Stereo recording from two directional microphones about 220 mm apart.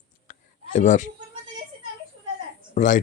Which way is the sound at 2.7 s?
35° left (ahead or behind).